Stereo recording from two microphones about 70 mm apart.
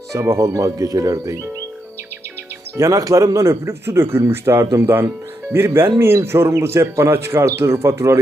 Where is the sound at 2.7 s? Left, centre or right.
Right.